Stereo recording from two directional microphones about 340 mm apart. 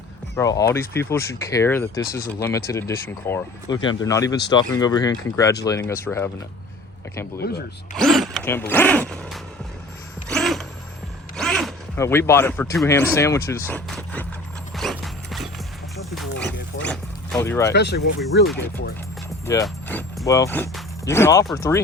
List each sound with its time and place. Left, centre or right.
0.3 s speech: centre
2.0 s speech: left
2.4 s speech: centre
7.3 s speech: left
7.9 s gasp: centre
10.2 s a sound: centre
11.3 s speech: centre
13.7 s vehicle: centre
14.8 s mechanisms: centre
16.8 s dog: centre
17.7 s speech: left
19.5 s speech: centre